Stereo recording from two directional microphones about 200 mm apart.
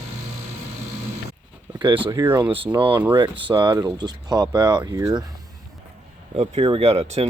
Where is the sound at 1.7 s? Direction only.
25° right (ahead or behind).